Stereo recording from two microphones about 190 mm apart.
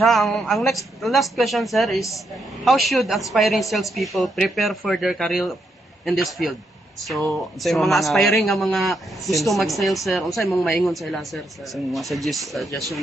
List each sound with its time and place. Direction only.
0.0 s a man's voice: centre (ahead or behind)